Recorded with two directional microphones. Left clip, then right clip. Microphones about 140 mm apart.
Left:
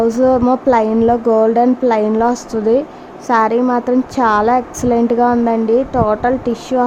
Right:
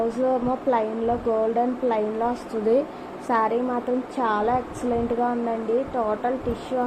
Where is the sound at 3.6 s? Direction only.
60° left (ahead or behind).